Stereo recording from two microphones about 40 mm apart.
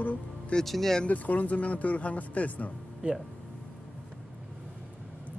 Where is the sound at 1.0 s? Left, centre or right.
Left.